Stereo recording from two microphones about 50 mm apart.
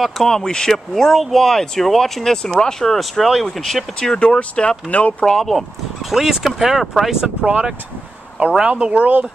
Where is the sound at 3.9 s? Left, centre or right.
Centre.